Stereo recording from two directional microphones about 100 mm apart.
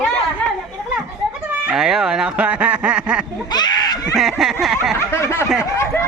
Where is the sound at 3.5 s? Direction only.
45° left (ahead or behind).